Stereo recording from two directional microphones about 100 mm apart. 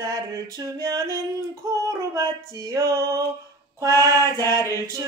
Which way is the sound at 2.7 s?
30° right (ahead or behind).